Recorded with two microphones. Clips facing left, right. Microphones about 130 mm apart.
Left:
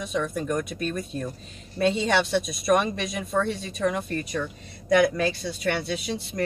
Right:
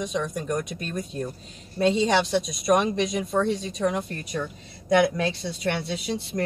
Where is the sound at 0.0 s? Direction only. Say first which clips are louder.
Even; 20° right (ahead or behind).